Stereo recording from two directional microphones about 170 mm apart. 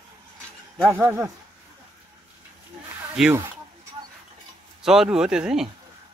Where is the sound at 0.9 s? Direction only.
15° right (ahead or behind).